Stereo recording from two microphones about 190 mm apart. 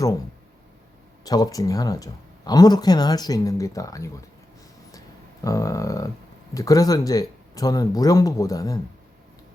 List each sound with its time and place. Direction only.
1.2 s speech: 20° left (ahead or behind)
4.9 s a sound: 20° left (ahead or behind)
6.5 s speech: 15° left (ahead or behind)